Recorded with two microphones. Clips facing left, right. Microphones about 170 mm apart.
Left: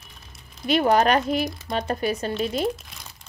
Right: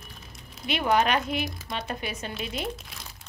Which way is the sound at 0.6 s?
40° left (ahead or behind).